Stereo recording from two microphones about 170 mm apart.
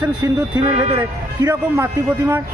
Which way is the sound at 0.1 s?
25° right (ahead or behind).